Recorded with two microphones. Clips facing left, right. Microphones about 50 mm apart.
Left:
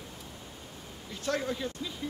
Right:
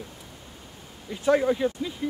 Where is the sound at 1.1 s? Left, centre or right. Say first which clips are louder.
Right 10 dB; centre.